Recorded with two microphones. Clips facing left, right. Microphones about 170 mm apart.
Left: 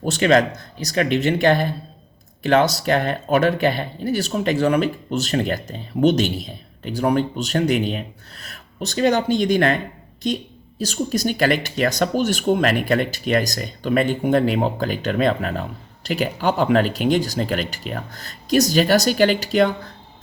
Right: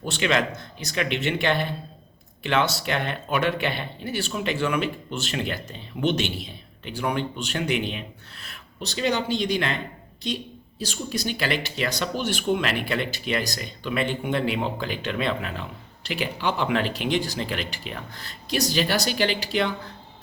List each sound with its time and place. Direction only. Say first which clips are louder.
0.0 s speech: left 7 dB; 45° left (ahead or behind)